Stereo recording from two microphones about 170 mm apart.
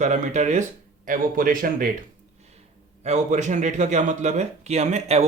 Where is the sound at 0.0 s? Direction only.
45° right (ahead or behind).